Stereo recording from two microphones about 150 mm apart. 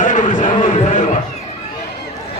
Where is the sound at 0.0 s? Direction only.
60° left (ahead or behind).